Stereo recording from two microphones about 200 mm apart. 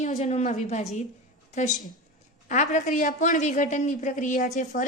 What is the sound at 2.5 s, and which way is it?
A woman's voice, 40° left (ahead or behind).